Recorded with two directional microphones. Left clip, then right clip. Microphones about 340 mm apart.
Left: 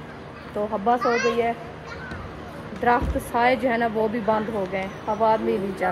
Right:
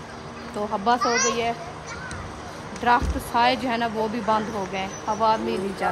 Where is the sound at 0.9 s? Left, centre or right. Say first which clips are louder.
Even; centre.